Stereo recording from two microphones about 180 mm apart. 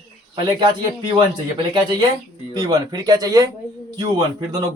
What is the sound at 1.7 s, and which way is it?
Speech, 25° right (ahead or behind).